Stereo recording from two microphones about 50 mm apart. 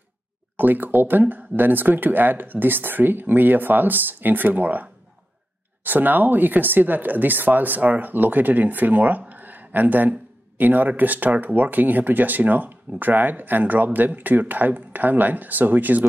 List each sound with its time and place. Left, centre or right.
0.6 s speech: right
5.9 s speech: right